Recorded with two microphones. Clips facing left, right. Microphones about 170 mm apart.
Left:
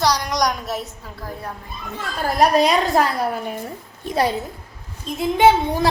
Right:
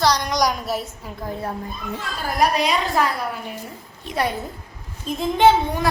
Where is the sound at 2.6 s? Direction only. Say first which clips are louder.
Left 4 dB; 40° left (ahead or behind).